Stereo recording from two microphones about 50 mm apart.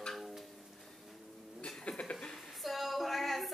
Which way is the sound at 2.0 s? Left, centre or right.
Left.